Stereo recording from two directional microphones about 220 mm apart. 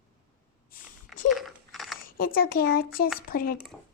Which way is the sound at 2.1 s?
40° left (ahead or behind).